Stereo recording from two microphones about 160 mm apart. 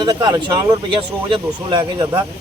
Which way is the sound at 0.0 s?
30° right (ahead or behind).